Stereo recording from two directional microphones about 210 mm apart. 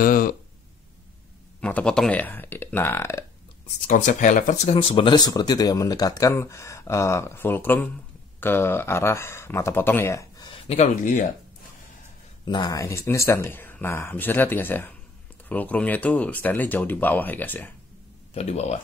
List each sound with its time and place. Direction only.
0.0 s speech: 45° left (ahead or behind)
1.6 s speech: 5° left (ahead or behind)
3.8 s speech: 40° left (ahead or behind); by 10.6 s 20° left (ahead or behind)
10.7 s speech: 35° left (ahead or behind)
12.4 s speech: 20° left (ahead or behind)
18.3 s speech: 30° left (ahead or behind)